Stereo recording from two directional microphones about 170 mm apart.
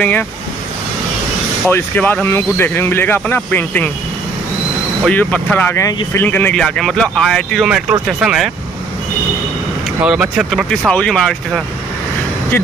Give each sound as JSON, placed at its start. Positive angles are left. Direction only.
{"t": 1.7, "sound": "speech", "side_deg": 10}
{"t": 5.0, "sound": "speech", "side_deg": 5}
{"t": 5.8, "sound": "speech", "side_deg": 20}
{"t": 6.2, "sound": "speech", "side_deg": 10}
{"t": 10.0, "sound": "speech", "side_deg": -5}